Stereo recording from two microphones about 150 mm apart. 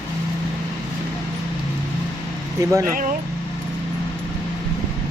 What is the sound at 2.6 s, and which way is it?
Speech, 20° right (ahead or behind).